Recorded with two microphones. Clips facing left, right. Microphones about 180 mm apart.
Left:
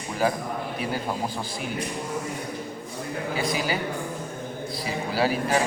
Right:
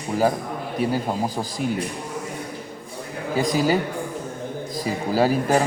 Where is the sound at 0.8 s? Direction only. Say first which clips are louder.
Right 8 dB; 40° right (ahead or behind).